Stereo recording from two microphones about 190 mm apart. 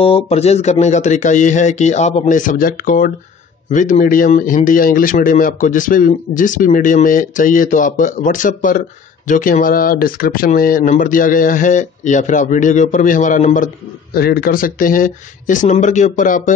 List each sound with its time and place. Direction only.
0.0 s speech: 30° left (ahead or behind)
14.1 s speech: 55° left (ahead or behind)